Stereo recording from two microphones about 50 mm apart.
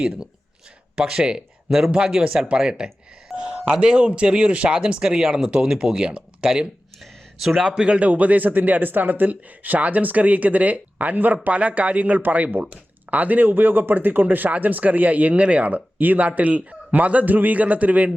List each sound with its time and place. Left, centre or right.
0.9 s speech: centre
2.4 s doorbell: centre
3.7 s speech: centre
7.0 s a sound: centre
7.6 s speech: centre
8.0 s speech: right